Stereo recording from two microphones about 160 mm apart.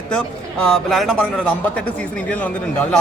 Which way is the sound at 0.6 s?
Centre (ahead or behind).